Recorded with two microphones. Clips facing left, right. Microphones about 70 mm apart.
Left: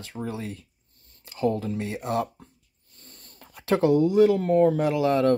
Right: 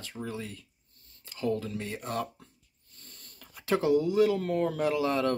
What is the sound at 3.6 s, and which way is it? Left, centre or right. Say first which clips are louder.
Speech: left 5 dB; left.